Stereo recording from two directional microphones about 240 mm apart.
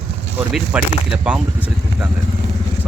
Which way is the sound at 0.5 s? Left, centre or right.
Centre.